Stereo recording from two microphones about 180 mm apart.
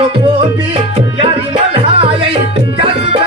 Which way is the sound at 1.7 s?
30° right (ahead or behind).